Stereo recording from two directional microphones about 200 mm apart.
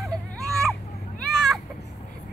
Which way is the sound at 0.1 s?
5° left (ahead or behind).